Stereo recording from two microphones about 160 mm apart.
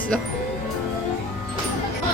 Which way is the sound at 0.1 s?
5° left (ahead or behind).